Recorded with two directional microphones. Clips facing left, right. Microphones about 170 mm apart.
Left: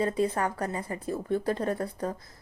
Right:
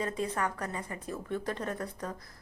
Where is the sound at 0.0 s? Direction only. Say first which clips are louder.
Left 6 dB; 30° left (ahead or behind).